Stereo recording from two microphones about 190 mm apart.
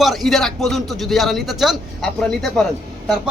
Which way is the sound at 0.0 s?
Centre (ahead or behind).